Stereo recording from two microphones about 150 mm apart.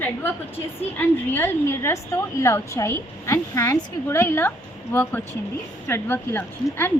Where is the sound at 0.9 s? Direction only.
15° left (ahead or behind).